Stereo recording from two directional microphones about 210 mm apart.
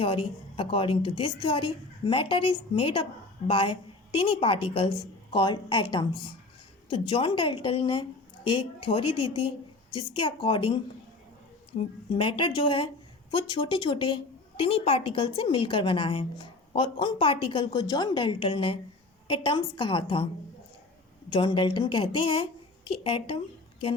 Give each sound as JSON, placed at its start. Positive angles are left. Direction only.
{"t": 0.0, "sound": "a woman's voice", "side_deg": 25}
{"t": 11.8, "sound": "a woman's voice", "side_deg": 25}
{"t": 21.2, "sound": "a woman's voice", "side_deg": 20}